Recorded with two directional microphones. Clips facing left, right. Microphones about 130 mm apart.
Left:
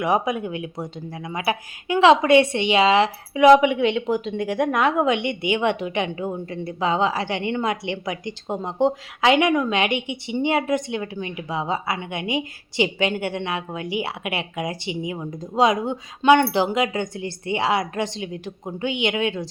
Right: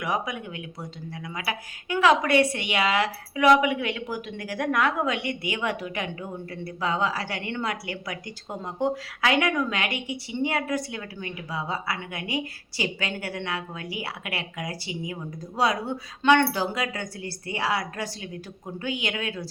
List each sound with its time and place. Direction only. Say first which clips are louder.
0.0 s a woman's voice: left 7 dB; 25° left (ahead or behind)